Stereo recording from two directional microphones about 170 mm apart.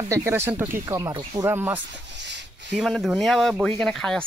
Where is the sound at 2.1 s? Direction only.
90° right.